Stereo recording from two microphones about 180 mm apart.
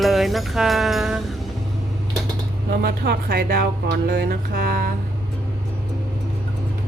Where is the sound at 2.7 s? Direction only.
55° right (ahead or behind).